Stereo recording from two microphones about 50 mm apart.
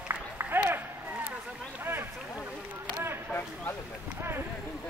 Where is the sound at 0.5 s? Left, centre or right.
Right.